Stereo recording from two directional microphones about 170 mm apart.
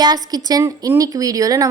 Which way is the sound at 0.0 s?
25° right (ahead or behind).